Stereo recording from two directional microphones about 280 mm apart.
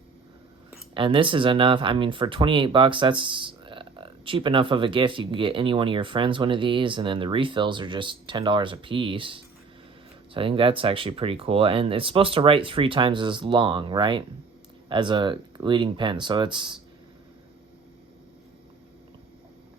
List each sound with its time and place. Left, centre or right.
0.7 s speech: centre